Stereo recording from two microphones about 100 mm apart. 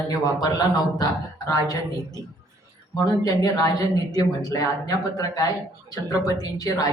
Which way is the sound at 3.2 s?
35° left (ahead or behind).